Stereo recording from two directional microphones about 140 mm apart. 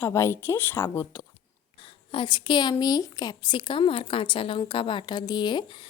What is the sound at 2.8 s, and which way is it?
A woman's voice, 25° left (ahead or behind).